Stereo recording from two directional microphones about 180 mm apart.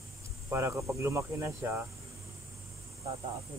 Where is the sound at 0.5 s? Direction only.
15° right (ahead or behind).